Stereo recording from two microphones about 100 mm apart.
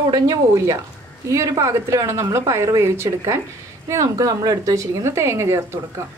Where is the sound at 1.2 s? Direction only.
30° right (ahead or behind).